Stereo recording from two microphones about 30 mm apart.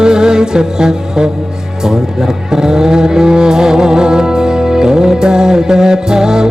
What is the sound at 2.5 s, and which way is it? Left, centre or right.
Music, right.